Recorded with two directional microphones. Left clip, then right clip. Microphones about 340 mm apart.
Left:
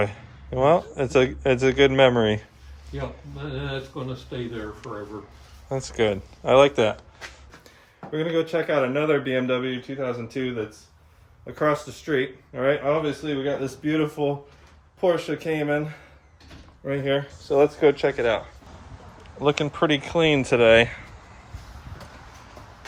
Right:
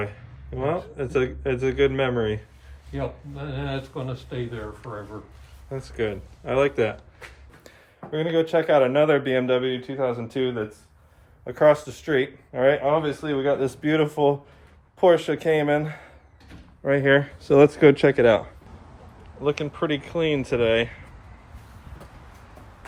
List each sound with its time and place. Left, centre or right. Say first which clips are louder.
0.0 s speech: left 6 dB; centre
5.7 s speech: left 5 dB; centre
8.1 s speech: right 2 dB; centre
11.4 s speech: right 6 dB; centre
14.0 s speech: right 5 dB; right
15.0 s speech: right 5 dB; centre
16.8 s speech: right 6 dB; centre
17.1 s speech: right 4 dB; right
19.4 s speech: left 3 dB; centre